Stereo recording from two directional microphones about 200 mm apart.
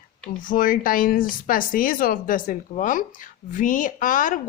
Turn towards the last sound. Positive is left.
turn(degrees=40)  # may be behind; listen again after turning